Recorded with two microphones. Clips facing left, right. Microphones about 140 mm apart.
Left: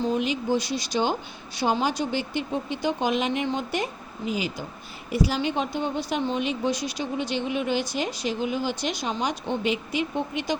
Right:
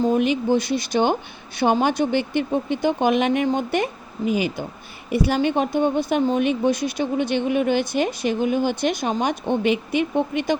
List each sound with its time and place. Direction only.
0.0 s speech: 55° right (ahead or behind)